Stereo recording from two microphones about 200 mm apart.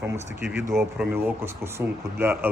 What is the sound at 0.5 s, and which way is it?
Speech, 5° right (ahead or behind).